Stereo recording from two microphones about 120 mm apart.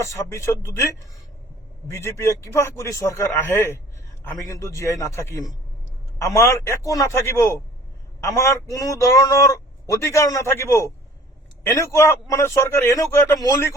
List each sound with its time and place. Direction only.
0.1 s a man's voice: 25° left (ahead or behind)
1.9 s a man's voice: 20° left (ahead or behind)